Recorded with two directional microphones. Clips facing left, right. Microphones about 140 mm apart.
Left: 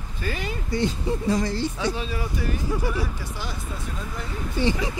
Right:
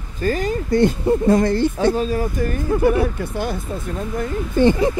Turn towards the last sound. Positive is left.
turn(degrees=-55)  # may be behind; listen again after turning